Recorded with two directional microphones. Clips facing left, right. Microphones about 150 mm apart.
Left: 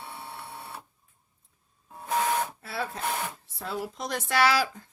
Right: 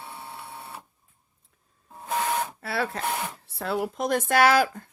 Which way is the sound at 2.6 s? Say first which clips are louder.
Right 5 dB; 70° right (ahead or behind).